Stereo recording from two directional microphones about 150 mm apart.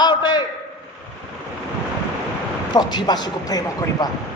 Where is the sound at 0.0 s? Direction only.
30° left (ahead or behind).